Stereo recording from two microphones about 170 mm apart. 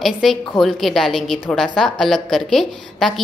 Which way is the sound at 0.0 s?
Centre (ahead or behind).